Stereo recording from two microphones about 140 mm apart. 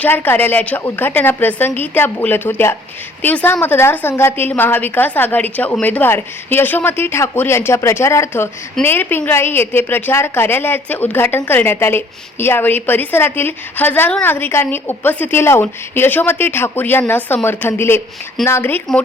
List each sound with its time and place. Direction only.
0.0 s a woman's voice: 15° left (ahead or behind)